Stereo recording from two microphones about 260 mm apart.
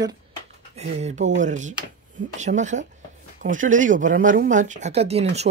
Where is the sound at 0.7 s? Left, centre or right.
Right.